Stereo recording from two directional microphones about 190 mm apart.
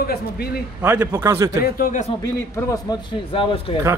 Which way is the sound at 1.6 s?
45° left (ahead or behind).